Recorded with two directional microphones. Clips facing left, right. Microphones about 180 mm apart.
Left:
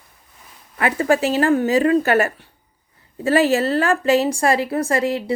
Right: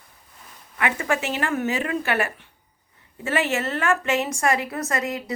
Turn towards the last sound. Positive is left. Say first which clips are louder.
# left 7 dB
turn(degrees=30)  # may be behind; listen again after turning